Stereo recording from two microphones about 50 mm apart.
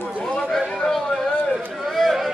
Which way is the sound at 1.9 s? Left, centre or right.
Centre.